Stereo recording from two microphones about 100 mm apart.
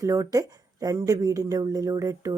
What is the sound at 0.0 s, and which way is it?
Speech, 35° right (ahead or behind).